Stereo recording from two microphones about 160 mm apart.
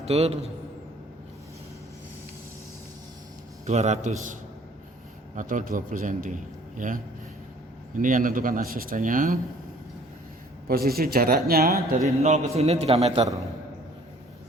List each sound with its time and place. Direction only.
0.0 s a man's voice: 40° right (ahead or behind)
3.7 s a man's voice: 45° right (ahead or behind)
10.7 s speech: 70° right (ahead or behind)
12.0 s a man's voice: 45° right (ahead or behind)